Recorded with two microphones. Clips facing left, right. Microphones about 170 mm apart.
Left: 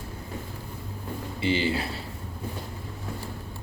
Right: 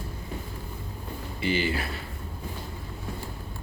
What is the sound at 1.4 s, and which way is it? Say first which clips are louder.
Speech: left 1 dB; 25° left (ahead or behind).